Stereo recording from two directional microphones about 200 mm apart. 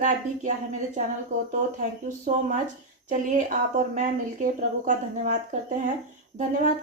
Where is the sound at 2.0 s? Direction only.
40° right (ahead or behind).